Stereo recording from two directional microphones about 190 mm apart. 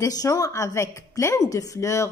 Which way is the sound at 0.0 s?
20° left (ahead or behind).